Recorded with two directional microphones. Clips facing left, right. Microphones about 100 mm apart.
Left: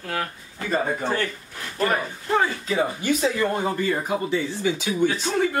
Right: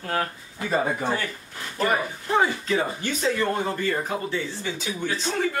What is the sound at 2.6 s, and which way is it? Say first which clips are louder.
Speech: left 3 dB; 10° left (ahead or behind).